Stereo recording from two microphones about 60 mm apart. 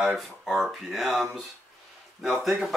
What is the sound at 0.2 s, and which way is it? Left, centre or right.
Speech, centre.